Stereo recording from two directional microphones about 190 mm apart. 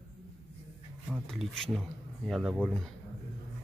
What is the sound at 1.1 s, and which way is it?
Speech, centre (ahead or behind).